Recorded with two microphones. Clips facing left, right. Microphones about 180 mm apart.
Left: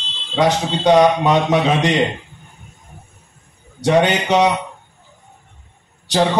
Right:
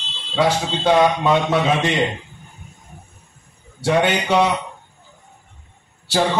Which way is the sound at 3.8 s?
20° left (ahead or behind).